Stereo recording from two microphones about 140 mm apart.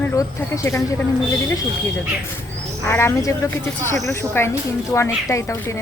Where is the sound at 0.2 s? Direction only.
20° left (ahead or behind).